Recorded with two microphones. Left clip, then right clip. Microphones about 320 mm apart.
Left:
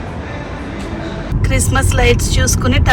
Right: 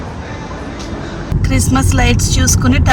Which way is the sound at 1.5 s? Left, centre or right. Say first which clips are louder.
Right 1 dB; centre.